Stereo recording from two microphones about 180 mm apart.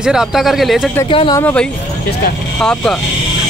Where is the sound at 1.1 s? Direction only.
30° left (ahead or behind).